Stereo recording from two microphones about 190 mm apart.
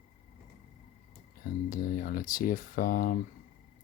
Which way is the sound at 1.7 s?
50° left (ahead or behind).